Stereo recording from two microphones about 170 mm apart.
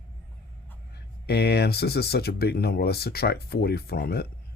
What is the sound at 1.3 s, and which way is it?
Speech, 70° left (ahead or behind).